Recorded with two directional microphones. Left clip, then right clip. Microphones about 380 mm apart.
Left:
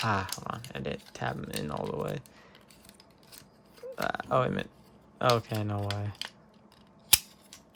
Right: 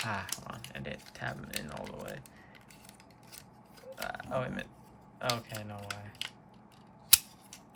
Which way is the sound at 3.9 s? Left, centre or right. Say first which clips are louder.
Left 8 dB; centre.